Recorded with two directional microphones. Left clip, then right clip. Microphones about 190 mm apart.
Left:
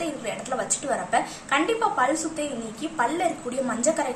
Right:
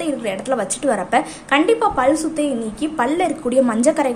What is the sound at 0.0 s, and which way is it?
A woman's voice, 50° right (ahead or behind).